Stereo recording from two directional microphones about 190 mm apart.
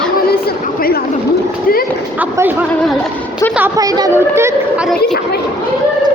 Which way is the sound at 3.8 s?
20° right (ahead or behind).